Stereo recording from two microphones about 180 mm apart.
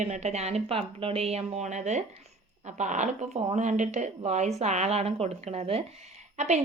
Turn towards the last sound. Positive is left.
turn(degrees=-40)  # may be behind; listen again after turning